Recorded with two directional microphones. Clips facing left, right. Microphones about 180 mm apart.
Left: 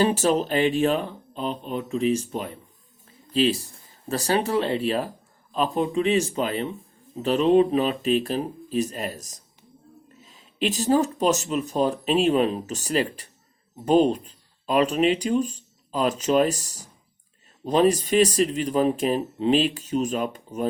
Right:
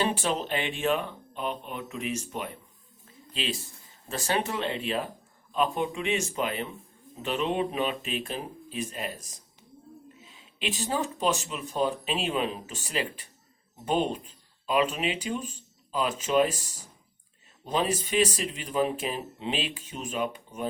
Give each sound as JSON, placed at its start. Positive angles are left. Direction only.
{"t": 0.0, "sound": "speech", "side_deg": 40}